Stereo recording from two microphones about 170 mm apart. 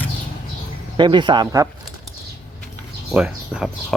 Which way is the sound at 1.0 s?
25° right (ahead or behind).